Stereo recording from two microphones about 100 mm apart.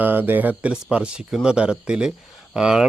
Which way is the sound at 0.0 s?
20° right (ahead or behind).